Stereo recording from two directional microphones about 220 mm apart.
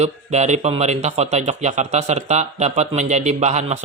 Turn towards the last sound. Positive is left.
turn(degrees=-30)  # may be behind; listen again after turning